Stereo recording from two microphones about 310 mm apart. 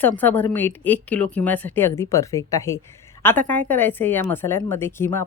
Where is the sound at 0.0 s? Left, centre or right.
Centre.